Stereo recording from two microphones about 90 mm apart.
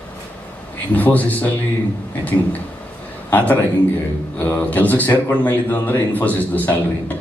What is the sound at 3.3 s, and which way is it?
Speech, 20° left (ahead or behind).